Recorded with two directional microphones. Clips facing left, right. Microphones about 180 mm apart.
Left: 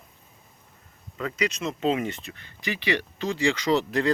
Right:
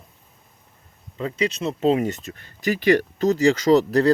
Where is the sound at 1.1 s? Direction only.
30° right (ahead or behind).